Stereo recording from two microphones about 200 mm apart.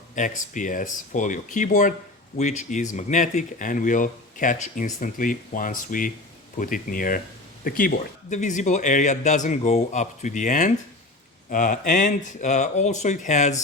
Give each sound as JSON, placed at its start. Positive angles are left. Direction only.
{"t": 0.2, "sound": "speech", "side_deg": 40}